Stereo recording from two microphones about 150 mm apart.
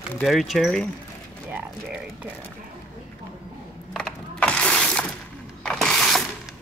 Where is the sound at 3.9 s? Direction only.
5° left (ahead or behind).